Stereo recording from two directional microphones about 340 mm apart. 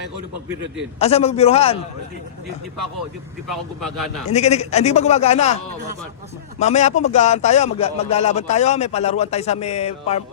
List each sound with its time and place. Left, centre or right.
0.9 s a man's voice: centre
3.5 s speech: centre
4.3 s a man's voice: centre
6.6 s a man's voice: centre